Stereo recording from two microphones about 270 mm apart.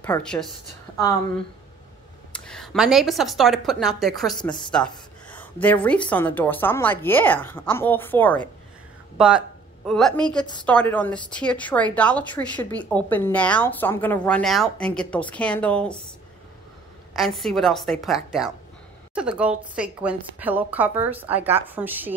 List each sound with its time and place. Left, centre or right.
0.0 s a woman's voice: centre
2.3 s a woman's voice: centre
4.4 s a woman's voice: centre
4.7 s a woman's voice: centre
9.8 s a woman's voice: centre
17.1 s a woman's voice: centre